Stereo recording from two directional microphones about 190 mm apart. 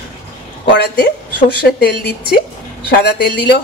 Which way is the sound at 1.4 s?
55° left (ahead or behind).